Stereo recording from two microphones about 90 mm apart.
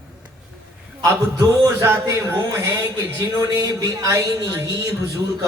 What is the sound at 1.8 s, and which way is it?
Speech, 30° right (ahead or behind).